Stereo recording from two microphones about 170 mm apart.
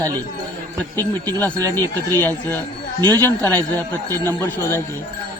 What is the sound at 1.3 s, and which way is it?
A man's voice, 10° left (ahead or behind).